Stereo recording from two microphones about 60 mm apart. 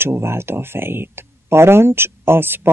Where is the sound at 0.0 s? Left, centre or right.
Right.